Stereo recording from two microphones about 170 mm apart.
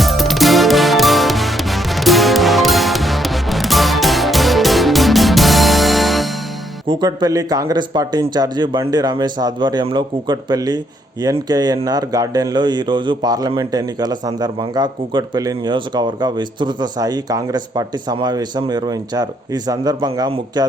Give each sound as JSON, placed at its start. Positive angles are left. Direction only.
{"t": 0.0, "sound": "music", "side_deg": 0}
{"t": 6.8, "sound": "a man's voice", "side_deg": -25}